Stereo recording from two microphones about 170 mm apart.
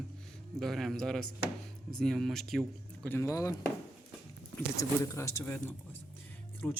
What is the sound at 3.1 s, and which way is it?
Speech, 20° left (ahead or behind).